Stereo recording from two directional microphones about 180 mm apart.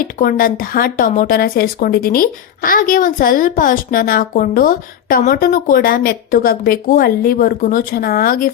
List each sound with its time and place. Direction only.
0.2 s a woman's voice: 50° left (ahead or behind)